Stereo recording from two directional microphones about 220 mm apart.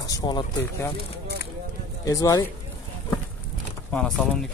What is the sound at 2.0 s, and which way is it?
Speech, 15° left (ahead or behind).